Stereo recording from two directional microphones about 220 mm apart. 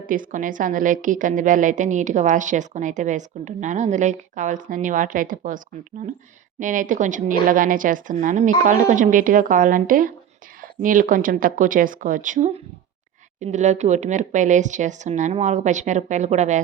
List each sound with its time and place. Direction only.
0.1 s a woman's voice: 40° right (ahead or behind)